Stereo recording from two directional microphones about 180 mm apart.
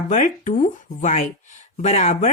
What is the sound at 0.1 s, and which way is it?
Speech, 45° left (ahead or behind).